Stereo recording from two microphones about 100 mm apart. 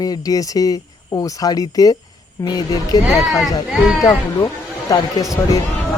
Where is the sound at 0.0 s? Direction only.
40° left (ahead or behind).